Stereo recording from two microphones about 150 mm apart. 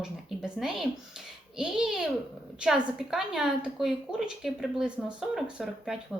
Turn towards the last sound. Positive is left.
turn(degrees=-5)  # may be behind; listen again after turning